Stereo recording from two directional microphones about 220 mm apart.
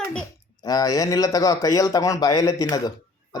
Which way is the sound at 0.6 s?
15° left (ahead or behind).